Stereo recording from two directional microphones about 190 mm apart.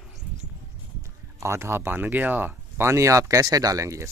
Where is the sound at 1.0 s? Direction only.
15° right (ahead or behind).